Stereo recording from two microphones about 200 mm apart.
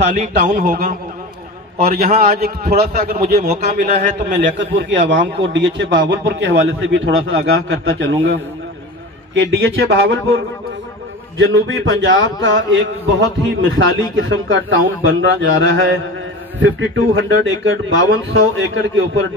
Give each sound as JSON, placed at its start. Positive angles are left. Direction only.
{"t": 0.1, "sound": "a man's voice", "side_deg": -40}
{"t": 4.3, "sound": "a man's voice", "side_deg": -60}
{"t": 11.3, "sound": "a man's voice", "side_deg": -70}